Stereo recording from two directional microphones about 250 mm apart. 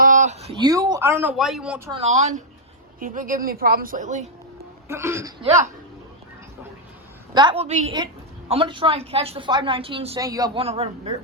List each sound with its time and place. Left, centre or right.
0.0 s a man's voice: right; by 1.9 s centre
1.9 s a woman's voice: right
4.9 s speech: centre
7.3 s a woman's voice: right